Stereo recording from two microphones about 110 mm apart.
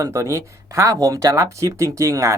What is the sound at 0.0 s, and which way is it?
Speech, 30° right (ahead or behind).